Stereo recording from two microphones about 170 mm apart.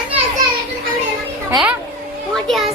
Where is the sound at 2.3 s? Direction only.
Centre (ahead or behind).